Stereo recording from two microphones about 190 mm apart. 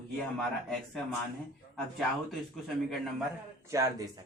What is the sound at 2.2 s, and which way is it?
Speech, centre (ahead or behind).